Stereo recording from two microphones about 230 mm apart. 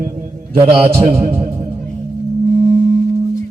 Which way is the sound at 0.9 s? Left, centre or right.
Right.